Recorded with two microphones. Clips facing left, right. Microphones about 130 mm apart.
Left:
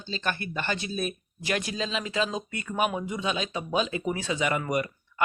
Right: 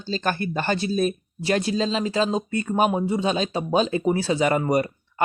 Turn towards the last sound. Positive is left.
turn(degrees=-35)  # may be behind; listen again after turning